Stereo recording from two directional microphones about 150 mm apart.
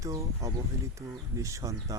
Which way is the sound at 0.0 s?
20° right (ahead or behind).